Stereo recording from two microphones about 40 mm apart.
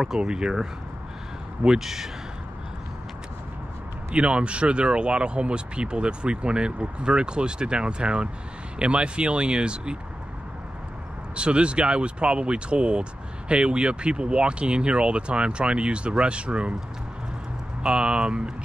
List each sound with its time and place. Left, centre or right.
0.2 s speech: right
1.7 s speech: centre
4.1 s speech: right
11.3 s speech: right
17.8 s speech: right